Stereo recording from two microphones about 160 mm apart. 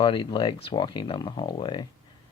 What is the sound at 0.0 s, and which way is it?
Speech, 30° left (ahead or behind).